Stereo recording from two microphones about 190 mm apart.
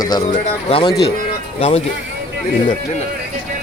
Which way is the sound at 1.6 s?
35° left (ahead or behind).